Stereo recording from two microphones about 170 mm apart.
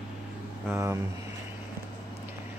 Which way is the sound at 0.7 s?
15° right (ahead or behind).